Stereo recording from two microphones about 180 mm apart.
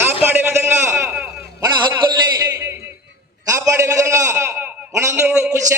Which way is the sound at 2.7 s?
15° right (ahead or behind).